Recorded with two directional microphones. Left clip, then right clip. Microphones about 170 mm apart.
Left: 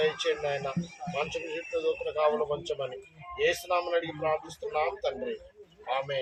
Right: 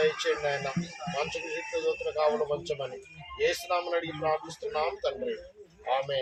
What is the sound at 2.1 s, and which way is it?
A man's voice, 5° left (ahead or behind).